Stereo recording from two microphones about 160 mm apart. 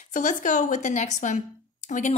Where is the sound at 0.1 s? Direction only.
50° left (ahead or behind).